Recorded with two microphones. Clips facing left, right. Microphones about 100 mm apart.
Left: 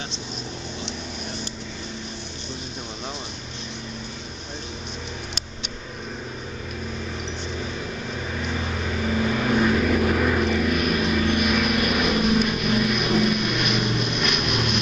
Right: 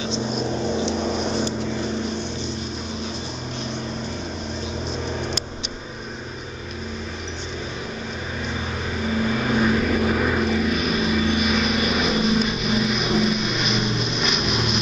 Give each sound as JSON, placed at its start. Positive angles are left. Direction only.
{"t": 9.2, "sound": "vehicle", "side_deg": -5}